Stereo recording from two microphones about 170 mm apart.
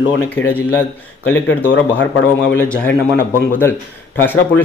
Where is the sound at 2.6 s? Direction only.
10° left (ahead or behind).